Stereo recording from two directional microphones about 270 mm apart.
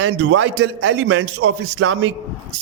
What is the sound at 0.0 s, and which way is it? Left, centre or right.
A man's voice, right.